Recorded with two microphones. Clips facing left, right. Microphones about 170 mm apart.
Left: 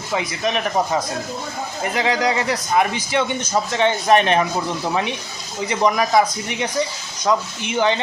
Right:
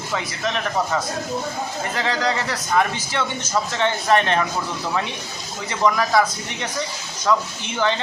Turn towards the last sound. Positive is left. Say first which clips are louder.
# left 3 dB
turn(degrees=15)  # may be behind; listen again after turning